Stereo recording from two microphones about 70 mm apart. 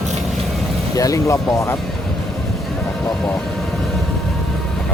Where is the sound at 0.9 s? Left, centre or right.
Left.